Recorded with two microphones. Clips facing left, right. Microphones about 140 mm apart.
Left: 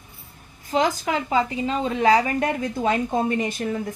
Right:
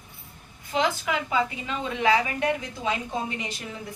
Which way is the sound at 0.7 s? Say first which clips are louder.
Left 4 dB; 40° left (ahead or behind).